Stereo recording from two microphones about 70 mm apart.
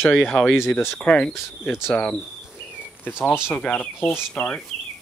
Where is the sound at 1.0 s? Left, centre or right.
Centre.